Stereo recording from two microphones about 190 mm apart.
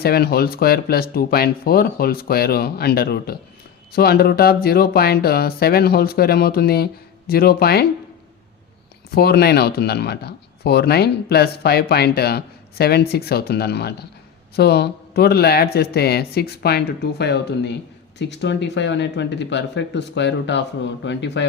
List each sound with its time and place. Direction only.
0.0 s speech: 55° left (ahead or behind)
9.1 s speech: 55° left (ahead or behind)